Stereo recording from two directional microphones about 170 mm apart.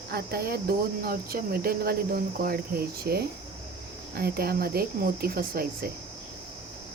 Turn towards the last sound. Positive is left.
turn(degrees=-60)  # may be behind; listen again after turning